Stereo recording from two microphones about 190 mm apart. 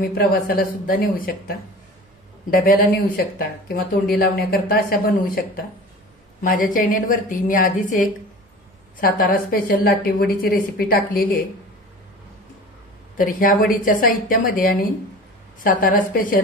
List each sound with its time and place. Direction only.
0.0 s a woman's voice: 50° left (ahead or behind)
2.5 s a woman's voice: 50° left (ahead or behind)
6.4 s a woman's voice: 45° left (ahead or behind)
13.2 s a woman's voice: 45° left (ahead or behind)